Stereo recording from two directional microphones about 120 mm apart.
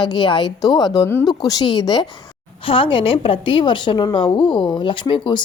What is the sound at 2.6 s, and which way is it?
A woman's voice, 45° left (ahead or behind).